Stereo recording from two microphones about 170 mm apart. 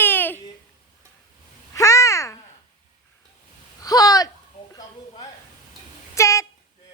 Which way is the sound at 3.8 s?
20° left (ahead or behind).